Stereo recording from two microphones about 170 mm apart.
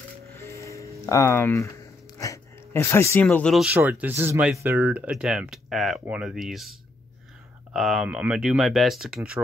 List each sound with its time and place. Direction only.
0.3 s music: 15° left (ahead or behind)
2.1 s a sound: 20° left (ahead or behind)
3.6 s speech: 10° right (ahead or behind)
7.7 s speech: centre (ahead or behind)